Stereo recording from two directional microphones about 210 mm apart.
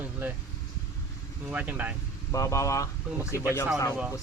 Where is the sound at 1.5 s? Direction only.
5° right (ahead or behind).